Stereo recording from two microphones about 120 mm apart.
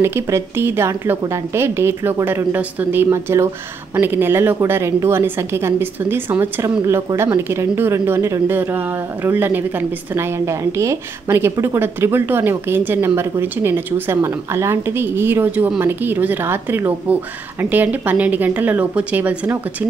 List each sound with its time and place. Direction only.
0.0 s a woman's voice: 20° right (ahead or behind)